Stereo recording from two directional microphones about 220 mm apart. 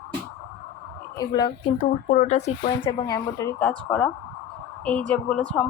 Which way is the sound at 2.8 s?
15° left (ahead or behind).